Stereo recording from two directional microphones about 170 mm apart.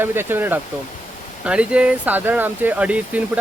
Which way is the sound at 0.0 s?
15° right (ahead or behind).